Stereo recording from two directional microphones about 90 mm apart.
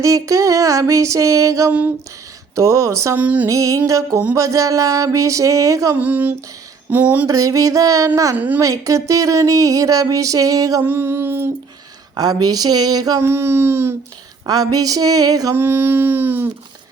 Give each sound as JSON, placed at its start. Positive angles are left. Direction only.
{"t": 0.0, "sound": "speech", "side_deg": -40}
{"t": 3.2, "sound": "speech", "side_deg": -20}
{"t": 3.5, "sound": "speech", "side_deg": -40}
{"t": 6.0, "sound": "speech", "side_deg": -20}
{"t": 7.3, "sound": "speech", "side_deg": -40}
{"t": 8.4, "sound": "speech", "side_deg": -20}
{"t": 8.6, "sound": "speech", "side_deg": -40}
{"t": 10.8, "sound": "speech", "side_deg": -25}
{"t": 12.1, "sound": "speech", "side_deg": -45}
{"t": 13.2, "sound": "speech", "side_deg": -30}
{"t": 14.4, "sound": "speech", "side_deg": -45}
{"t": 15.5, "sound": "speech", "side_deg": -25}